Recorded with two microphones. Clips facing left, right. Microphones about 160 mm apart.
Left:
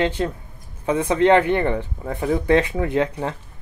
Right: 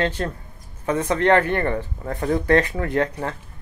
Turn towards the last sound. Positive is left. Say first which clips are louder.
# left 1 dB
turn(degrees=15)  # may be behind; listen again after turning